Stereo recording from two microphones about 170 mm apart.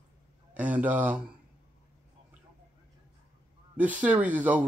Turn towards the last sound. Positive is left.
turn(degrees=-10)  # may be behind; listen again after turning